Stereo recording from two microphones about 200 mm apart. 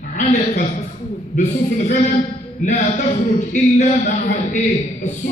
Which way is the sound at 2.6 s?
40° left (ahead or behind).